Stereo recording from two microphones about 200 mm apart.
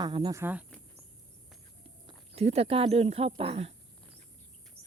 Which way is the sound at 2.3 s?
30° right (ahead or behind).